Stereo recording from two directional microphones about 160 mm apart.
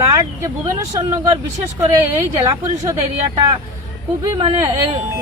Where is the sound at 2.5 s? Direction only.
25° right (ahead or behind).